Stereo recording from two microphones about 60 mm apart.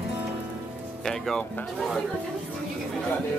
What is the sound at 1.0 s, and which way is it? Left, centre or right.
Speech, centre.